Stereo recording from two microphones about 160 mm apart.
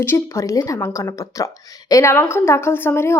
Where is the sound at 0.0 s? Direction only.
15° left (ahead or behind).